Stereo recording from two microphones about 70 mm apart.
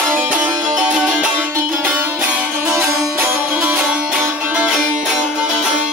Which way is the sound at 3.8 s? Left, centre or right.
Centre.